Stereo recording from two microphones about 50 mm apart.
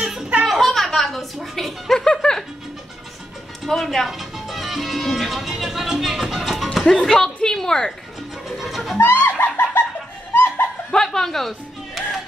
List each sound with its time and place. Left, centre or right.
0.0 s a sound: centre
0.5 s music: centre
2.0 s a woman's voice: centre
3.6 s a woman's voice: centre
8.5 s music: centre
8.9 s music: left
10.9 s music: centre